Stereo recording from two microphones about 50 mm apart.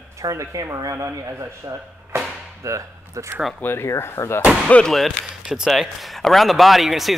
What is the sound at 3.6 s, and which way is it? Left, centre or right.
Speech, left.